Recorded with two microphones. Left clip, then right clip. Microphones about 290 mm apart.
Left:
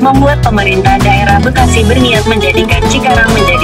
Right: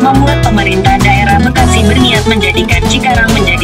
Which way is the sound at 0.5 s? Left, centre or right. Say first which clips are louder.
Left 1 dB; centre.